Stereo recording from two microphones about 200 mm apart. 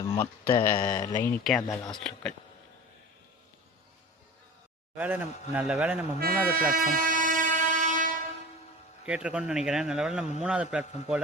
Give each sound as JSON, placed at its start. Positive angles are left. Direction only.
{"t": 0.6, "sound": "speech", "side_deg": 15}
{"t": 1.6, "sound": "speech", "side_deg": 20}
{"t": 2.0, "sound": "a man's voice", "side_deg": 5}
{"t": 4.9, "sound": "a man's voice", "side_deg": -10}
{"t": 6.1, "sound": "vehicle", "side_deg": -45}
{"t": 9.0, "sound": "a man's voice", "side_deg": -5}